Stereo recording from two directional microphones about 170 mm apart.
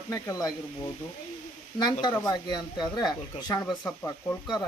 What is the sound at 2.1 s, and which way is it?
Speech, 20° left (ahead or behind).